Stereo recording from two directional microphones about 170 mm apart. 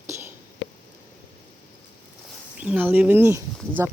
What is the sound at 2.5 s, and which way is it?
Speech, 5° right (ahead or behind).